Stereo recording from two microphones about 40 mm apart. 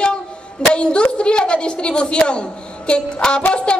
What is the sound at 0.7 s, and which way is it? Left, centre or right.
A woman's voice, left.